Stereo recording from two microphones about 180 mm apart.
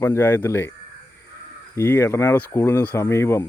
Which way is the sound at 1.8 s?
15° left (ahead or behind).